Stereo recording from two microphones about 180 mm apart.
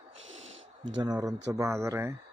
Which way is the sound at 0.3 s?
90° right.